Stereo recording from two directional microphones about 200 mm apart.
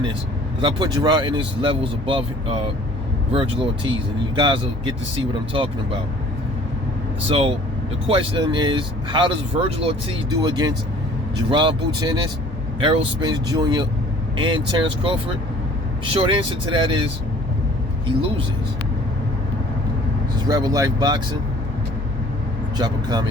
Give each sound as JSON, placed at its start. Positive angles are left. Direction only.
{"t": 0.6, "sound": "speech", "side_deg": -20}
{"t": 7.3, "sound": "speech", "side_deg": -30}
{"t": 20.5, "sound": "speech", "side_deg": -20}
{"t": 22.8, "sound": "speech", "side_deg": -20}